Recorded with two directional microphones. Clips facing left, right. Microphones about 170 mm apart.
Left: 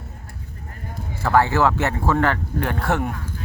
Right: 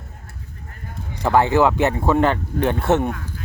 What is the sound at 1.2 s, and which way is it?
Speech, 20° right (ahead or behind).